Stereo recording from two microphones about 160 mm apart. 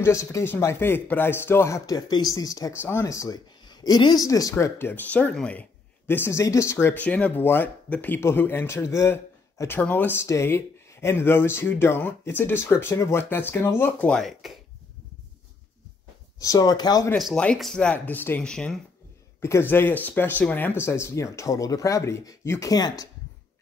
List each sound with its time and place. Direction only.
0.0 s speech: 20° left (ahead or behind); by 14.6 s centre (ahead or behind)
16.3 s speech: 20° left (ahead or behind)
17.2 s speech: 5° left (ahead or behind); by 23.0 s 25° left (ahead or behind)